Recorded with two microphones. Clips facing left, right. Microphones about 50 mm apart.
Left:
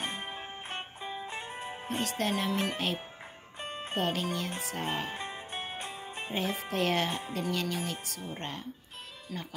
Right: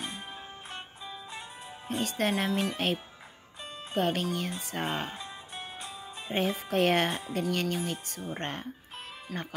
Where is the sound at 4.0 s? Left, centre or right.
Right.